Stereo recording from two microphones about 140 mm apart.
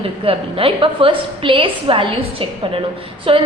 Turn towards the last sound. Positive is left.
turn(degrees=-40)  # may be behind; listen again after turning